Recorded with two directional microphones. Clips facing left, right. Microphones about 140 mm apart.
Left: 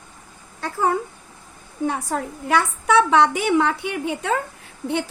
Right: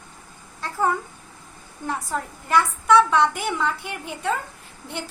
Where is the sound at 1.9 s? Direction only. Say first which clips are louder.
Left 1 dB; 75° left (ahead or behind).